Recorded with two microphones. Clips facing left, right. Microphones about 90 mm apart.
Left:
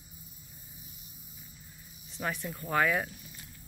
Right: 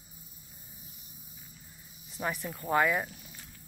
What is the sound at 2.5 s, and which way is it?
Speech, 25° right (ahead or behind).